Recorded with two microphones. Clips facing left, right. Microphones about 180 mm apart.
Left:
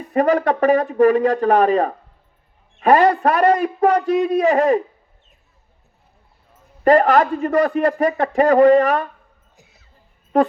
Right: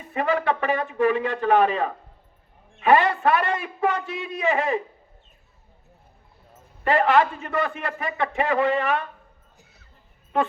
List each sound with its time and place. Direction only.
0.1 s a man's voice: 40° left (ahead or behind)
6.8 s a man's voice: 40° left (ahead or behind)
10.3 s a man's voice: 40° left (ahead or behind)